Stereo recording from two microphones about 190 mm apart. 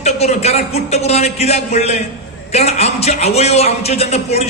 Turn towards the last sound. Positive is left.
turn(degrees=35)  # may be behind; listen again after turning